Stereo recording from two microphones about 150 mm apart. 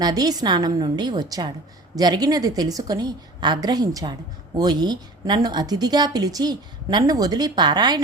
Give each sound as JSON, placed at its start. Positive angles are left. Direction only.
{"t": 0.0, "sound": "a woman's voice", "side_deg": -25}